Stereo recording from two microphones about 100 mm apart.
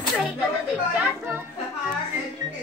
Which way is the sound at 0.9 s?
20° right (ahead or behind).